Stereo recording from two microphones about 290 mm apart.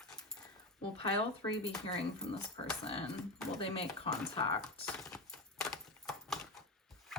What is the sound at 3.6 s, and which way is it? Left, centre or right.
Speech, centre.